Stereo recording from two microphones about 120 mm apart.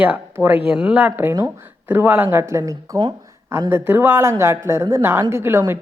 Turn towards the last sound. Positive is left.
turn(degrees=-20)  # may be behind; listen again after turning